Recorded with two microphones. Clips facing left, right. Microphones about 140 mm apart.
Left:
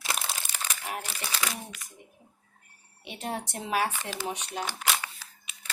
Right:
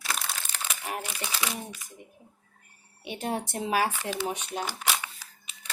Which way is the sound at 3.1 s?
5° right (ahead or behind).